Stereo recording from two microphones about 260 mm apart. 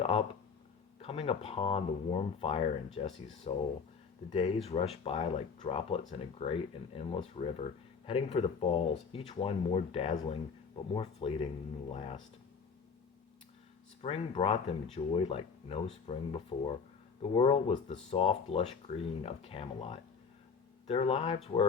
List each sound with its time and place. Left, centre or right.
0.0 s a sound: left
1.0 s speech: left
14.0 s speech: left